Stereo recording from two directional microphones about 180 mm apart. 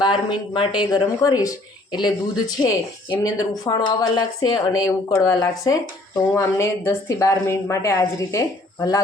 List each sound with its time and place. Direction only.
0.0 s a woman's voice: 25° left (ahead or behind)